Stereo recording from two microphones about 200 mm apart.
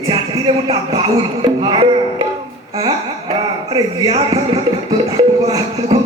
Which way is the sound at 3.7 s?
30° right (ahead or behind).